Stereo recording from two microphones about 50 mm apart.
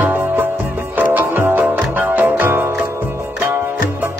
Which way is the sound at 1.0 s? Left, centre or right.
Right.